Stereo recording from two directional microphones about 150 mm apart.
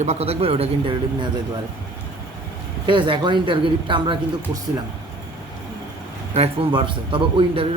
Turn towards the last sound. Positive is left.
turn(degrees=-35)  # may be behind; listen again after turning